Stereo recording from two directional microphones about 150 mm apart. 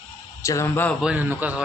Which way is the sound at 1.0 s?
10° right (ahead or behind).